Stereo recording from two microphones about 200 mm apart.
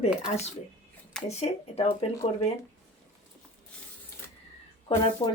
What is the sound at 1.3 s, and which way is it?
Speech, 30° left (ahead or behind).